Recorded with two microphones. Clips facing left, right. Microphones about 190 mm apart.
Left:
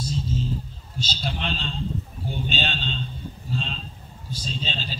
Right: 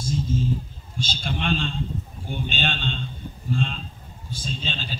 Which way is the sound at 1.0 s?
50° right (ahead or behind).